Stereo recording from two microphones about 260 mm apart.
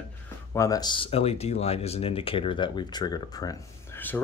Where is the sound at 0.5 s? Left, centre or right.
Centre.